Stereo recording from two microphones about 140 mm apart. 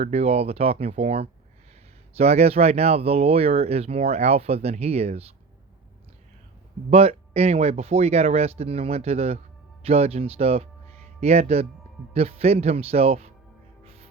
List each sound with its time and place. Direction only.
0.0 s speech: 50° right (ahead or behind)
6.9 s speech: 45° right (ahead or behind)
13.8 s music: 45° right (ahead or behind)